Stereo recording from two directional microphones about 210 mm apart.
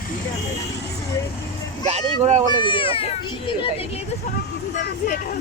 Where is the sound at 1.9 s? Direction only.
30° right (ahead or behind).